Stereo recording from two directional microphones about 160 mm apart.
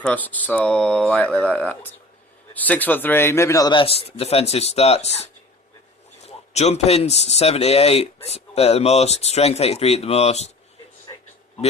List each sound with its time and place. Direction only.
0.0 s speech: 10° left (ahead or behind); by 10.5 s 40° left (ahead or behind)